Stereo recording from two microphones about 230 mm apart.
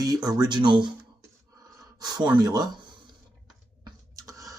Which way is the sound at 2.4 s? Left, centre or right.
Centre.